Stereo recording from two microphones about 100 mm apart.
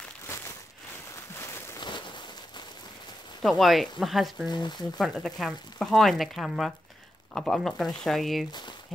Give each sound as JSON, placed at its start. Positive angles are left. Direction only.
{"t": 1.3, "sound": "a sound", "side_deg": 25}
{"t": 1.8, "sound": "a sound", "side_deg": 50}
{"t": 3.4, "sound": "speech", "side_deg": 0}
{"t": 4.5, "sound": "speech", "side_deg": 50}
{"t": 4.9, "sound": "speech", "side_deg": 5}
{"t": 8.5, "sound": "speech", "side_deg": 45}